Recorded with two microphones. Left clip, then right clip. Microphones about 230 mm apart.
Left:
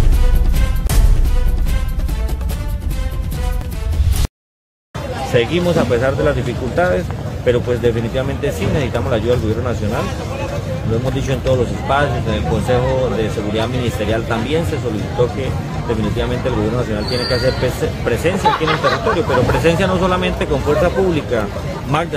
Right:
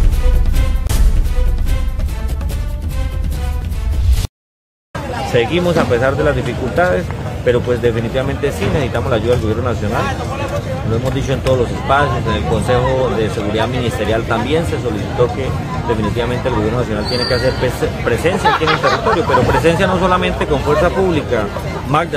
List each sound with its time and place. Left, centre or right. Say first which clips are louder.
5.3 s speech: right 1 dB; centre
11.1 s speech: right 2 dB; centre
16.2 s speech: right 2 dB; centre
18.5 s speech: right 2 dB; right
19.1 s speech: right 3 dB; centre